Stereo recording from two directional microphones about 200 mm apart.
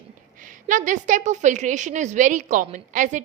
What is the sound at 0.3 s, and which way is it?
A woman's voice, 40° right (ahead or behind).